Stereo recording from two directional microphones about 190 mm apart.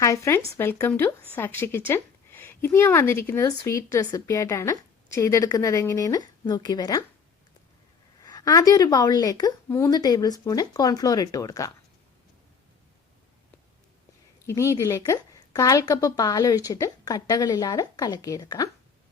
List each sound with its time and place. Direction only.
0.0 s a woman's voice: 15° left (ahead or behind)
8.2 s a woman's voice: 20° left (ahead or behind)
14.4 s a woman's voice: 15° left (ahead or behind)